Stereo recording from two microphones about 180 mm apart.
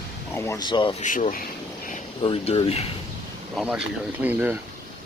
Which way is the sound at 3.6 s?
5° right (ahead or behind).